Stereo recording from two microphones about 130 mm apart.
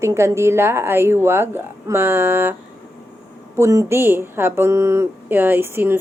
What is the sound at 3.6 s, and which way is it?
Speech, 25° right (ahead or behind).